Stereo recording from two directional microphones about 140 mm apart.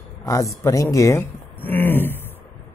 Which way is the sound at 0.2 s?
25° left (ahead or behind).